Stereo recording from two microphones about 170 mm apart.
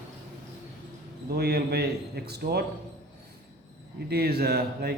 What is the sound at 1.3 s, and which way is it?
A man's voice, 70° right (ahead or behind).